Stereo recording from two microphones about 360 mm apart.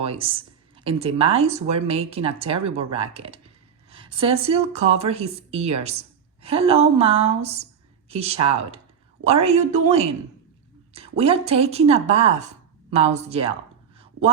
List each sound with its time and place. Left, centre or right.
0.0 s speech: centre
11.2 s speech: centre